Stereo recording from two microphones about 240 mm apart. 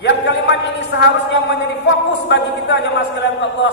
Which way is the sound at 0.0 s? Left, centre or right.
Left.